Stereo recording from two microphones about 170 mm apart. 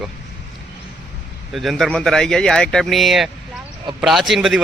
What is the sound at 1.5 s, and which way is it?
Speech, centre (ahead or behind).